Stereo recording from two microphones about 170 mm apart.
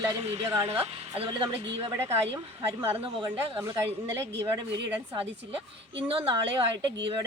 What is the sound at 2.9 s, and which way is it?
Speech, 30° right (ahead or behind).